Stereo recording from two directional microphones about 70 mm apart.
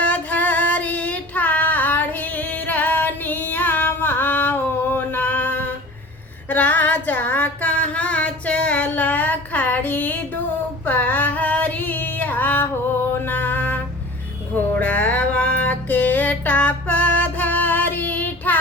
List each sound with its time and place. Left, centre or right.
0.0 s female singing: left
10.8 s a sound: left
13.1 s music: left
14.8 s music: left